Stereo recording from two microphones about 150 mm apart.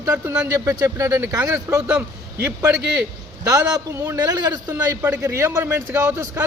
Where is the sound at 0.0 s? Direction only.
20° right (ahead or behind).